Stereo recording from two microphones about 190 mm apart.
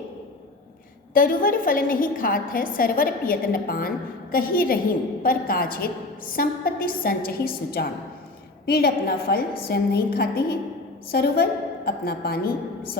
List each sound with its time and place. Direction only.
1.1 s a woman's voice: 45° left (ahead or behind)